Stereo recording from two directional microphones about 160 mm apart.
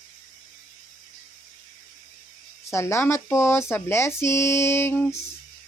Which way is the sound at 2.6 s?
15° left (ahead or behind).